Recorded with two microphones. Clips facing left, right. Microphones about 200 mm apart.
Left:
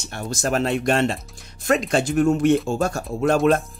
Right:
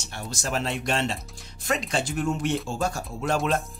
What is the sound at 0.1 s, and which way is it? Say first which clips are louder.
Speech: left 7 dB; 55° left (ahead or behind).